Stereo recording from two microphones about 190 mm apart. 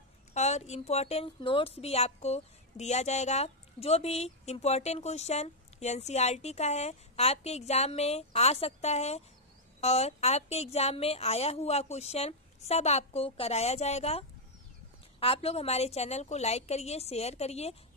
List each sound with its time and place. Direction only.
0.3 s a woman's voice: 35° left (ahead or behind)